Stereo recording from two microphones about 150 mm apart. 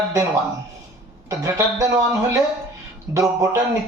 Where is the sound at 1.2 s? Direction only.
20° right (ahead or behind).